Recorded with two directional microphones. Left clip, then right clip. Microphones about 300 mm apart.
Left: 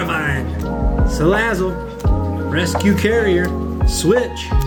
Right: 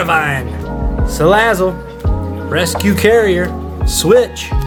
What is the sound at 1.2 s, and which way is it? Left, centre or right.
Speech, right.